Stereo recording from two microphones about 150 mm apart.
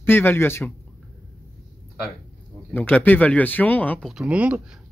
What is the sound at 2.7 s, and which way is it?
Speech, 10° left (ahead or behind).